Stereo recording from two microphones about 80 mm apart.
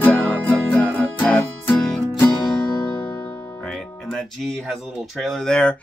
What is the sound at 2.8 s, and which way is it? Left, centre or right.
Music, centre.